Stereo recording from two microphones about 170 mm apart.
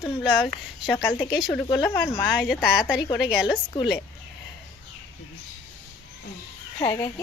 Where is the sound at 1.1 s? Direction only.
20° left (ahead or behind).